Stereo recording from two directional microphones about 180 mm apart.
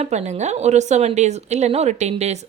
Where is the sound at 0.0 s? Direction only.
40° right (ahead or behind).